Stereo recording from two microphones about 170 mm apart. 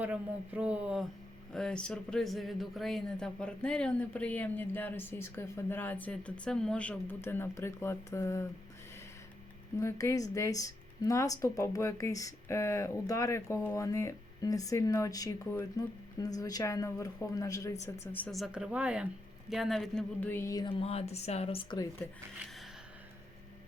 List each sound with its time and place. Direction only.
0.0 s speech: 10° right (ahead or behind)
1.5 s speech: 5° left (ahead or behind)
9.7 s speech: 15° left (ahead or behind)
18.3 s speech: 5° right (ahead or behind); by 21.8 s 30° left (ahead or behind)